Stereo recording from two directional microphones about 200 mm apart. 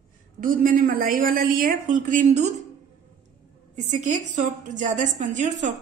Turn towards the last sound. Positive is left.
turn(degrees=-40)  # may be behind; listen again after turning